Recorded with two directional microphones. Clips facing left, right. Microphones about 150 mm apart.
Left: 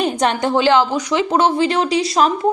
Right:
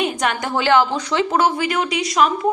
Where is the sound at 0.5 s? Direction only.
20° left (ahead or behind).